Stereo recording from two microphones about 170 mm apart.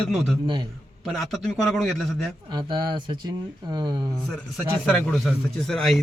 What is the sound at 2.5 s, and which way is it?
Speech, 25° right (ahead or behind).